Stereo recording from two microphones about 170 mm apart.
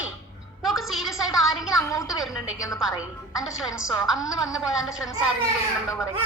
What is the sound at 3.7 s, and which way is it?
Speech, 20° left (ahead or behind).